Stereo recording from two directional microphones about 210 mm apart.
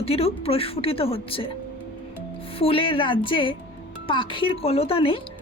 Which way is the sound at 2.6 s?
25° left (ahead or behind).